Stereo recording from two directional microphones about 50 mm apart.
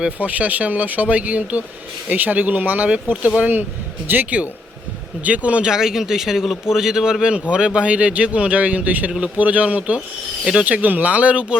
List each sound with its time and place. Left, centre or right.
0.2 s a man's voice: right
5.6 s a man's voice: centre
10.4 s a man's voice: centre
10.7 s a man's voice: right